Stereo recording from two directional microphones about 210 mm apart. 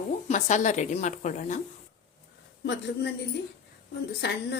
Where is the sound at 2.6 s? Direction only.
55° left (ahead or behind).